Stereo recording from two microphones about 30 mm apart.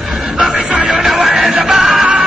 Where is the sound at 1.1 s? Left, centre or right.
Right.